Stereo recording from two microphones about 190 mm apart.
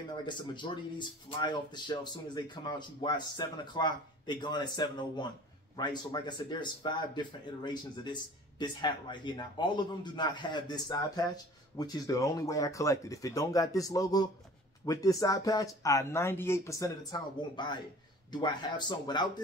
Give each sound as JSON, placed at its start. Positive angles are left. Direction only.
{"t": 0.2, "sound": "speech", "side_deg": 25}